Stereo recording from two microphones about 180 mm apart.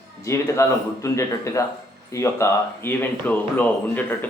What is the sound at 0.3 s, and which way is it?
Speech, 15° left (ahead or behind).